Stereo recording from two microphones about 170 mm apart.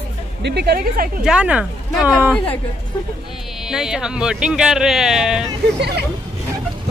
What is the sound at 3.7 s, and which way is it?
Speech, 5° right (ahead or behind).